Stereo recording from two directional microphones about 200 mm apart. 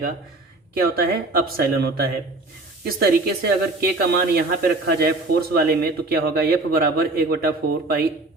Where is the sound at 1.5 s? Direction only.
50° right (ahead or behind).